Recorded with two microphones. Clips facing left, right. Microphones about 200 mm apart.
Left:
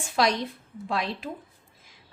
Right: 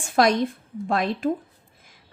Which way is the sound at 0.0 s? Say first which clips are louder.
Right 5 dB; 50° right (ahead or behind).